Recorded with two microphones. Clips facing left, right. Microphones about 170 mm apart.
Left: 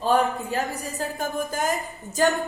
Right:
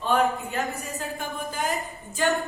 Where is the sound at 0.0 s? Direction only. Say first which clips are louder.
Left 2 dB; 35° left (ahead or behind).